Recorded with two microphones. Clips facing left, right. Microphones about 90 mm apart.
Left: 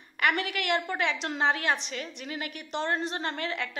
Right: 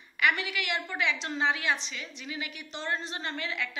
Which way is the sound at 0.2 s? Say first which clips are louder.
Left 1 dB; 50° left (ahead or behind).